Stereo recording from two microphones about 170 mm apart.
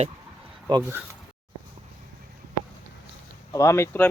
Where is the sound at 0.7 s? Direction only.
25° right (ahead or behind).